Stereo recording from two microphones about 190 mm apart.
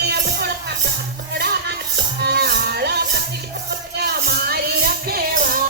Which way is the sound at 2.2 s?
60° right (ahead or behind).